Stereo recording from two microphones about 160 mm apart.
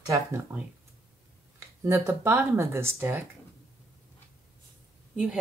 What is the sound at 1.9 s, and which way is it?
Speech, 15° right (ahead or behind).